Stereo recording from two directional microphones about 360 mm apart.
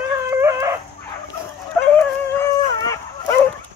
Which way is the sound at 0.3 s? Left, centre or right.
Centre.